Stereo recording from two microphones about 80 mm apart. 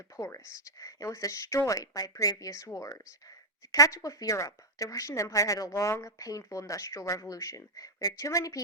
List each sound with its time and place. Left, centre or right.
0.2 s a woman's voice: left